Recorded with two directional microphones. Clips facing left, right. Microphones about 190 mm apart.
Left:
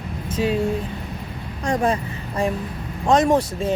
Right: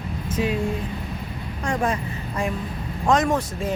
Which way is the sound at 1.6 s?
35° left (ahead or behind).